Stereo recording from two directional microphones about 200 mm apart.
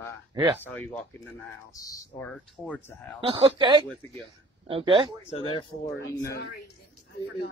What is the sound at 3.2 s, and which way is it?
Speech, 30° right (ahead or behind).